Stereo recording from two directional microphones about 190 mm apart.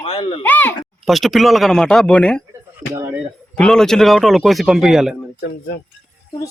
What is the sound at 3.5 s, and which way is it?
Speech, 5° left (ahead or behind).